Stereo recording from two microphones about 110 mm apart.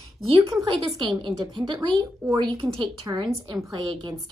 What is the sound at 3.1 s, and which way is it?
Speech, 35° right (ahead or behind).